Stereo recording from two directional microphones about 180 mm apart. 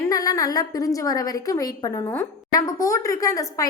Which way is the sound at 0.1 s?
20° left (ahead or behind).